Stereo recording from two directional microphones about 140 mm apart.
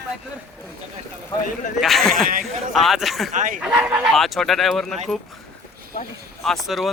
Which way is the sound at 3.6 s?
10° right (ahead or behind).